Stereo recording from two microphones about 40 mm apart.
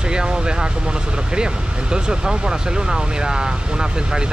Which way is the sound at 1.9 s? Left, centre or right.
Centre.